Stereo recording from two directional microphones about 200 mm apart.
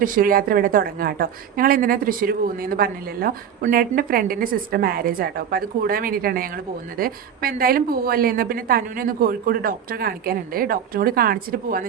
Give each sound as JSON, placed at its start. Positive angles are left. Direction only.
{"t": 0.0, "sound": "a woman's voice", "side_deg": -45}